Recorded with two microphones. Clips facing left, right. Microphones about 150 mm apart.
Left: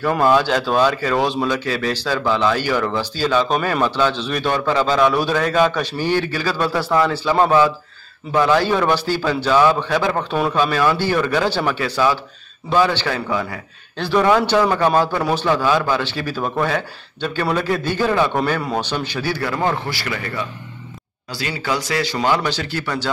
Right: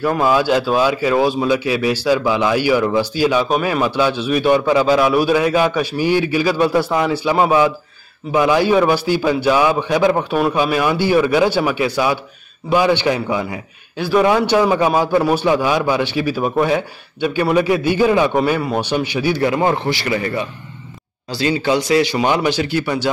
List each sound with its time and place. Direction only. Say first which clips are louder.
0.0 s a man's voice: even; 5° right (ahead or behind)